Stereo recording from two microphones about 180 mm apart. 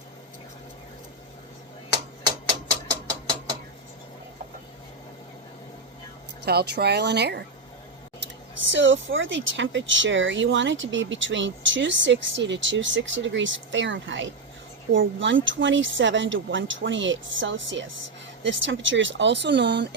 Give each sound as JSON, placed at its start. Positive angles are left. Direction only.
{"t": 6.4, "sound": "a woman's voice", "side_deg": -65}
{"t": 8.7, "sound": "speech", "side_deg": -90}